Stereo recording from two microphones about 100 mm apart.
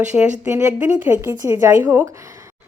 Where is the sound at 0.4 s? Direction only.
25° right (ahead or behind).